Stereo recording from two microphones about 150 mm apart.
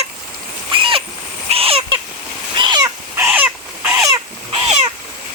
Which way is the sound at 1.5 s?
40° right (ahead or behind).